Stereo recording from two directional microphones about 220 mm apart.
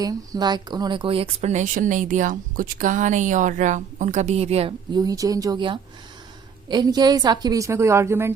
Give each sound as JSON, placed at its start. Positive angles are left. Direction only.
{"t": 0.0, "sound": "a woman's voice", "side_deg": -15}